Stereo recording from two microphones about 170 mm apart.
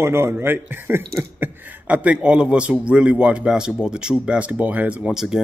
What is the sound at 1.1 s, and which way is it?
A man's voice, 10° right (ahead or behind).